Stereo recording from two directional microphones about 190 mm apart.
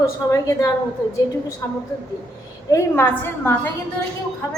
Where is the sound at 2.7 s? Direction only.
15° left (ahead or behind).